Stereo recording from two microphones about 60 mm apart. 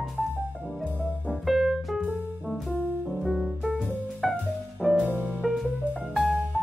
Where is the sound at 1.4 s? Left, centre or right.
Centre.